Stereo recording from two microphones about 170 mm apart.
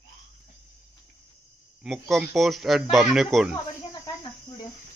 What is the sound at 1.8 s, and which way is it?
Speech, centre (ahead or behind).